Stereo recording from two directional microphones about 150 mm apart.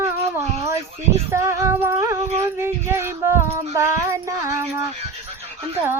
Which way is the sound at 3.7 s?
20° right (ahead or behind).